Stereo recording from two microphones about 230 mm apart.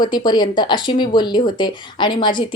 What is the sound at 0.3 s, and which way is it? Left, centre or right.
Speech, centre.